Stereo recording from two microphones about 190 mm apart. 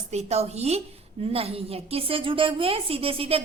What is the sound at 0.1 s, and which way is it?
A woman's voice, 35° right (ahead or behind).